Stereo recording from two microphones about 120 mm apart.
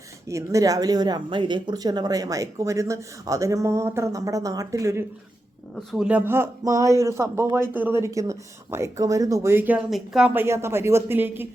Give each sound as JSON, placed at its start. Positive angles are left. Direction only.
{"t": 0.3, "sound": "speech", "side_deg": -25}
{"t": 5.7, "sound": "speech", "side_deg": -5}
{"t": 9.9, "sound": "speech", "side_deg": -5}
{"t": 10.3, "sound": "speech", "side_deg": -20}